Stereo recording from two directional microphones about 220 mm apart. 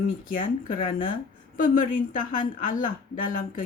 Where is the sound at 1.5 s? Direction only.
40° left (ahead or behind).